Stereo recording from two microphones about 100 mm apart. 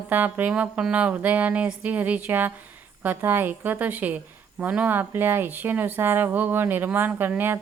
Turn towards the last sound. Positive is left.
turn(degrees=-20)  # may be behind; listen again after turning